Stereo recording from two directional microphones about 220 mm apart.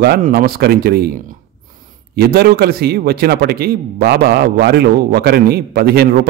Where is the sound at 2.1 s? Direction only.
45° right (ahead or behind).